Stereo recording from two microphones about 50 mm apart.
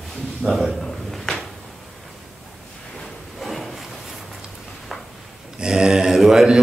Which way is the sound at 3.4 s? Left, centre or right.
Centre.